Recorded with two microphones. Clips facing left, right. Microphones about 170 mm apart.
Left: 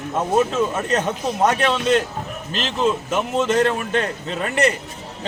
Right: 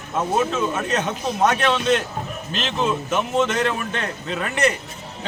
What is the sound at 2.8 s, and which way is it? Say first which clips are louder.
Speech: left 2 dB; 5° left (ahead or behind).